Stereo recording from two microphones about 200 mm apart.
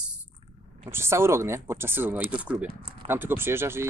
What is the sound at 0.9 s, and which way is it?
Speech, 10° right (ahead or behind).